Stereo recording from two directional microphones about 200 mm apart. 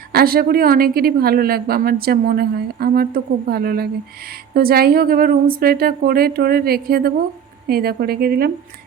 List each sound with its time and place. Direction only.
0.1 s speech: 50° right (ahead or behind)